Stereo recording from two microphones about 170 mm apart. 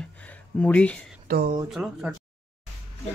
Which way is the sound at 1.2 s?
65° right (ahead or behind).